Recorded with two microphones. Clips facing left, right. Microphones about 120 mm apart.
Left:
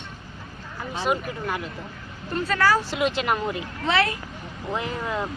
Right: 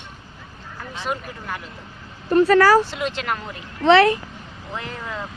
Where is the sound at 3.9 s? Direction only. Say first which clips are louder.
Right 10 dB; 70° right (ahead or behind).